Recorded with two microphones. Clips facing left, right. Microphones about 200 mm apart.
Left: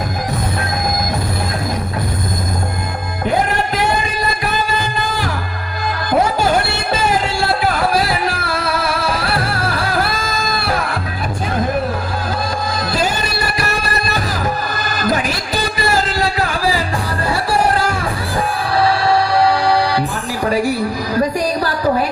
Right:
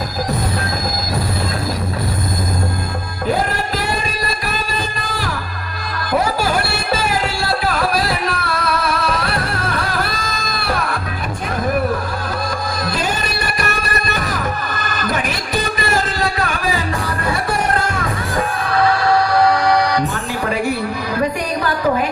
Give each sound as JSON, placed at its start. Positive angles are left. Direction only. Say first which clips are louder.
{"t": 7.4, "sound": "music", "louder": "left 2 dB", "side_deg": 25}
{"t": 14.7, "sound": "music", "louder": "left 3 dB", "side_deg": 35}
{"t": 17.2, "sound": "music", "louder": "left 4 dB", "side_deg": 30}
{"t": 21.2, "sound": "music", "louder": "left 3 dB", "side_deg": 35}